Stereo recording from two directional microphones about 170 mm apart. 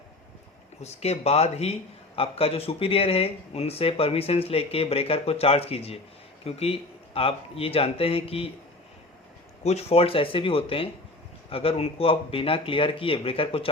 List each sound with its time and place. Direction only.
0.8 s speech: 40° left (ahead or behind)
9.6 s speech: 35° left (ahead or behind)